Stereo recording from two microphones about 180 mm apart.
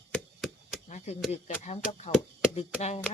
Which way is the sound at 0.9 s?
40° left (ahead or behind).